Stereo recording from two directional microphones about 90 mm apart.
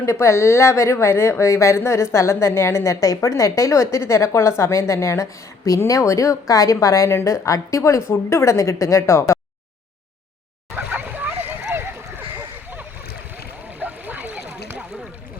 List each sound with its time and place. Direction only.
0.0 s a woman's voice: 30° left (ahead or behind)
10.8 s splash: 20° right (ahead or behind)
11.7 s a sound: 25° right (ahead or behind)
13.7 s duck: 20° right (ahead or behind)